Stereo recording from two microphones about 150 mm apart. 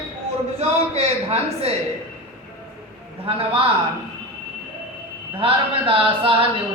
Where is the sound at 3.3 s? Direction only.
40° right (ahead or behind).